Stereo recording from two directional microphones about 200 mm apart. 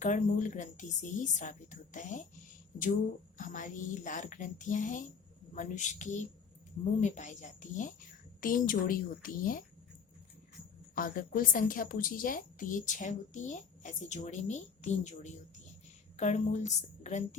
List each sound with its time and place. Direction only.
0.0 s a woman's voice: 40° left (ahead or behind)
3.3 s a woman's voice: 40° left (ahead or behind)
10.9 s a woman's voice: 45° left (ahead or behind)